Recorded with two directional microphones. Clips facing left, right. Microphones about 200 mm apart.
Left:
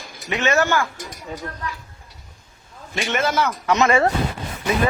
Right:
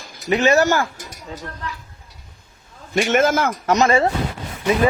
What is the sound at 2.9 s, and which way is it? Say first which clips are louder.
Speech: right 5 dB; 50° right (ahead or behind).